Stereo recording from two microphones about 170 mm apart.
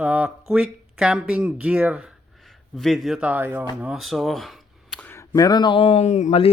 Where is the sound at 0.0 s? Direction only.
10° right (ahead or behind).